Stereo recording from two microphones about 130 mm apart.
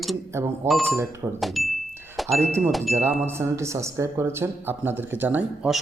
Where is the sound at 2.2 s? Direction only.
Centre (ahead or behind).